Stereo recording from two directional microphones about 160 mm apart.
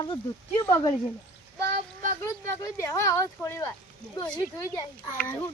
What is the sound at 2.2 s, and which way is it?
Speech, 15° left (ahead or behind).